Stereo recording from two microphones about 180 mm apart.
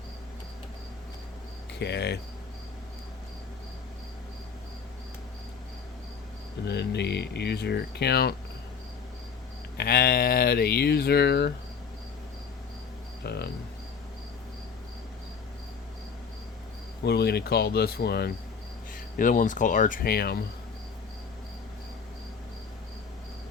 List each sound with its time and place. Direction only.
1.8 s speech: 70° left (ahead or behind)
6.7 s speech: 70° left (ahead or behind)
9.7 s speech: 60° left (ahead or behind)
13.2 s speech: 65° left (ahead or behind)
17.0 s speech: 65° left (ahead or behind)
18.9 s cricket: 50° left (ahead or behind)